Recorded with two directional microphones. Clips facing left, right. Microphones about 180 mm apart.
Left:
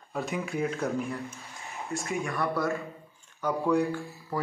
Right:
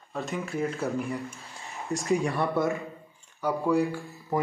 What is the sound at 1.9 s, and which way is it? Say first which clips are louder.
Speech: right 6 dB; 20° right (ahead or behind).